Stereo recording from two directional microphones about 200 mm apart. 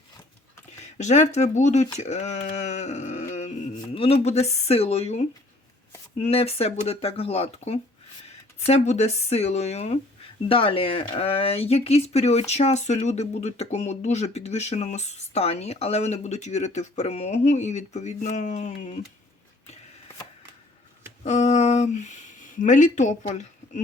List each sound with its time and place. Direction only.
0.9 s speech: 35° left (ahead or behind)
21.2 s speech: 35° left (ahead or behind)